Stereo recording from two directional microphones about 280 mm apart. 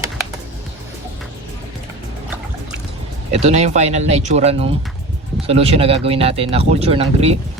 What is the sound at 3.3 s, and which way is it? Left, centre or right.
Speech, right.